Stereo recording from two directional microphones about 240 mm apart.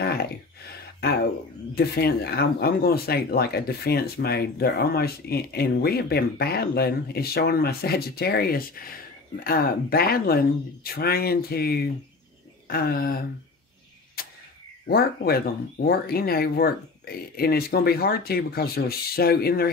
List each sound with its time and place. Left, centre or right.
0.0 s a sound: left
1.8 s speech: left
14.2 s tick-tock: left
14.9 s speech: left